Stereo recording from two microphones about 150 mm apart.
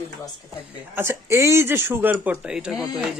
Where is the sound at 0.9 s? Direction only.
15° right (ahead or behind).